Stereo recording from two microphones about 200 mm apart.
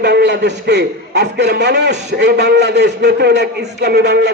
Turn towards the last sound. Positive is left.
turn(degrees=-55)  # may be behind; listen again after turning